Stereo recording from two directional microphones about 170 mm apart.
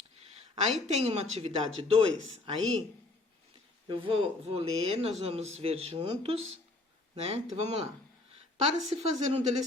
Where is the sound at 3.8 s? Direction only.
30° right (ahead or behind).